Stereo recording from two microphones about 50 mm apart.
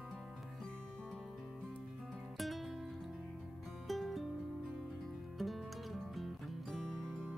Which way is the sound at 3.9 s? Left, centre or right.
Centre.